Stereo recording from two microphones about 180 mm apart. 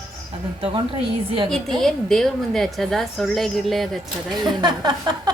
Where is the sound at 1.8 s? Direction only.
Centre (ahead or behind).